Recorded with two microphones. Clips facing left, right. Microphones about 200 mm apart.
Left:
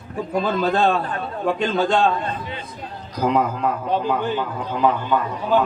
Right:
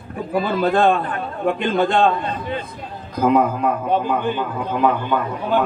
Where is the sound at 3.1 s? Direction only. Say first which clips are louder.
Right 4 dB; 50° right (ahead or behind).